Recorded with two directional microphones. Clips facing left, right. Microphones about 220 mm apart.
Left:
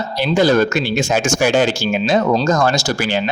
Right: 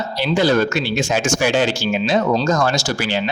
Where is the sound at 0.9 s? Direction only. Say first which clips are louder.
Left 2 dB; 45° left (ahead or behind).